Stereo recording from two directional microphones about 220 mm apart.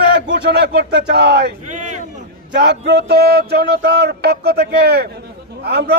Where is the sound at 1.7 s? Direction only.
35° right (ahead or behind).